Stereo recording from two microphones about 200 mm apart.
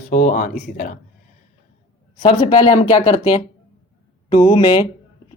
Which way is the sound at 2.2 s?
25° left (ahead or behind).